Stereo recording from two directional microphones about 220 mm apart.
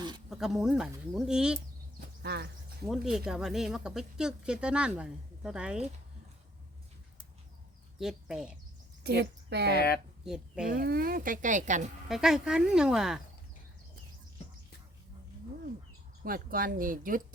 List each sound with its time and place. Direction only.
0.3 s speech: centre (ahead or behind)
2.0 s a sound: 50° right (ahead or behind)
2.8 s speech: centre (ahead or behind)
7.9 s speech: centre (ahead or behind)
9.0 s a woman's voice: 50° right (ahead or behind)
10.2 s speech: 5° right (ahead or behind)
10.7 s speech: 40° right (ahead or behind)
12.0 s speech: centre (ahead or behind)
16.2 s speech: 40° right (ahead or behind)